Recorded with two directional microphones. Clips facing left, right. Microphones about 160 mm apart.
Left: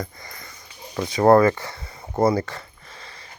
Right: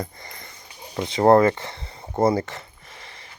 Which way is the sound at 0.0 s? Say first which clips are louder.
Even; 25° right (ahead or behind).